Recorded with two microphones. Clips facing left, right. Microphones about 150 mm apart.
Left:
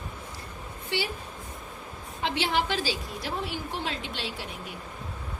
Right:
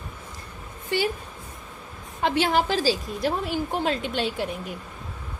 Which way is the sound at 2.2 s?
45° right (ahead or behind).